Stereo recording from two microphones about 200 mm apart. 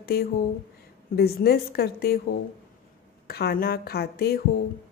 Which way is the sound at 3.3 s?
50° left (ahead or behind).